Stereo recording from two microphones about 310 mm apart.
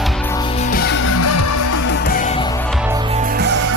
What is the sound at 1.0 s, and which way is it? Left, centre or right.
Music, left.